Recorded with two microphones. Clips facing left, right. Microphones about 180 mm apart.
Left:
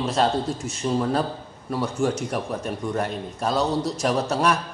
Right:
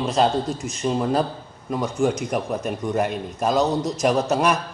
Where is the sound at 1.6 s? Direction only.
15° right (ahead or behind).